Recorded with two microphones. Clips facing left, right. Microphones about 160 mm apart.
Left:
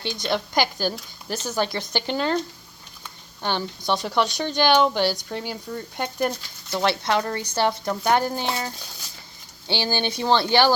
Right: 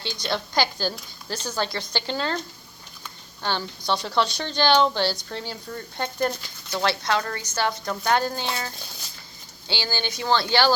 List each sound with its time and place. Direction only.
0.3 s a woman's voice: 15° left (ahead or behind)
3.4 s a woman's voice: 20° left (ahead or behind)